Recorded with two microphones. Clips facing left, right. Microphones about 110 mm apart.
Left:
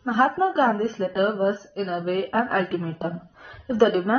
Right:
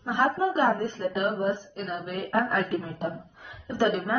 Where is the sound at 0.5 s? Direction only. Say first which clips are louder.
Left 3 dB; 15° left (ahead or behind).